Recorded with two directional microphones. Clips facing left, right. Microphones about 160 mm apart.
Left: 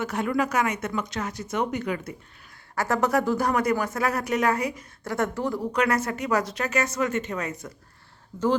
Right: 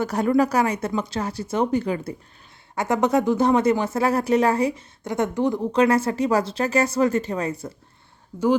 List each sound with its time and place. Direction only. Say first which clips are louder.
0.0 s a woman's voice: right 6 dB; 35° right (ahead or behind)
2.7 s speech: right 3 dB; 20° right (ahead or behind)